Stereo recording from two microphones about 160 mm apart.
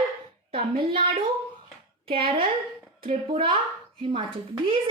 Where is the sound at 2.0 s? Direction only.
35° right (ahead or behind).